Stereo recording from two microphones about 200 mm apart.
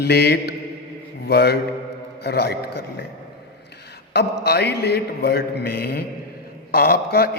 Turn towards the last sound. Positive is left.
turn(degrees=50)  # may be behind; listen again after turning